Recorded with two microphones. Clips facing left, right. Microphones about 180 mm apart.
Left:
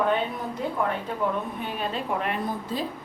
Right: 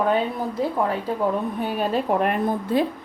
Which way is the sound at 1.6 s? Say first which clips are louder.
Right 7 dB; 45° right (ahead or behind).